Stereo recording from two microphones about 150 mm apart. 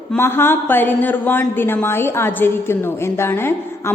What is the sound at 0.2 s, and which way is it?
A woman's voice, 15° left (ahead or behind).